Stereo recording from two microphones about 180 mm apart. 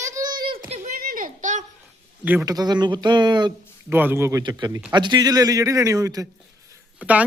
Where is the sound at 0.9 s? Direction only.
55° right (ahead or behind).